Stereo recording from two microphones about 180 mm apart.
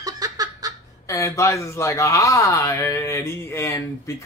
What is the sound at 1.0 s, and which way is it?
Speech, 15° left (ahead or behind).